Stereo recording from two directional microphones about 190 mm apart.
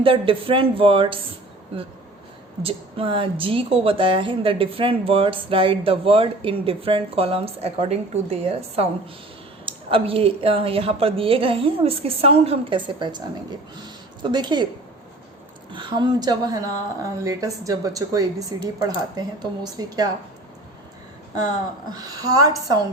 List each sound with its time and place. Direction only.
0.0 s speech: 30° right (ahead or behind)
2.6 s speech: 30° right (ahead or behind)
15.7 s speech: 25° right (ahead or behind)
21.9 s speech: 20° right (ahead or behind)